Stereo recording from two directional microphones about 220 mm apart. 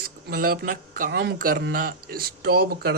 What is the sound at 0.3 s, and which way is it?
Speech, 40° right (ahead or behind).